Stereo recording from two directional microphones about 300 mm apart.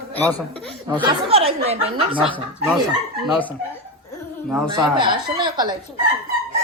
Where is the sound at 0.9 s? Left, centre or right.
Centre.